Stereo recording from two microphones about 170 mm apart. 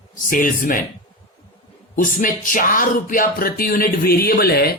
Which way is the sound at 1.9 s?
50° left (ahead or behind).